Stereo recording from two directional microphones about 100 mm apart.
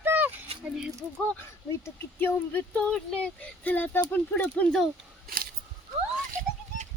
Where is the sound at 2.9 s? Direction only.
10° left (ahead or behind).